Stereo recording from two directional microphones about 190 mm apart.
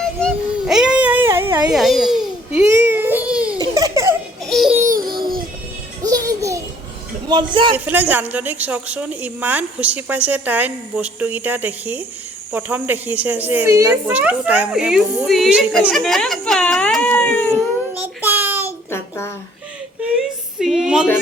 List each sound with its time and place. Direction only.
0.0 s child singing: centre (ahead or behind)
1.7 s babbling: centre (ahead or behind)
3.6 s baby laughter: 20° right (ahead or behind)
4.4 s baby laughter: centre (ahead or behind)
5.1 s music: 50° right (ahead or behind)
6.0 s music: 20° right (ahead or behind)
7.3 s a man's voice: 25° right (ahead or behind)
7.9 s a woman's voice: 10° right (ahead or behind); by 17.4 s 10° left (ahead or behind)
17.9 s child singing: 10° right (ahead or behind)
18.9 s a sound: 10° left (ahead or behind)
20.6 s a sound: centre (ahead or behind)